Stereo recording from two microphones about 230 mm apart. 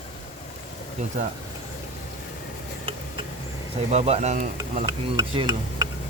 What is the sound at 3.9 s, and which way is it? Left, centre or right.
Speech, right.